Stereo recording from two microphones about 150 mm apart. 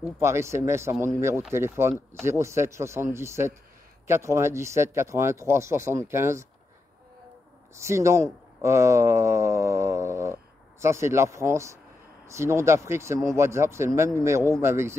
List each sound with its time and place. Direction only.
0.2 s speech: 20° right (ahead or behind)
7.8 s speech: 20° right (ahead or behind)